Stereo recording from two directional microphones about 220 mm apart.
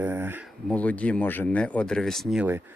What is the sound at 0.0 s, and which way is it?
Speech, 10° right (ahead or behind).